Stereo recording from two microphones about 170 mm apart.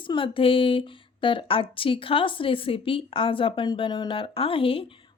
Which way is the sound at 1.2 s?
30° left (ahead or behind).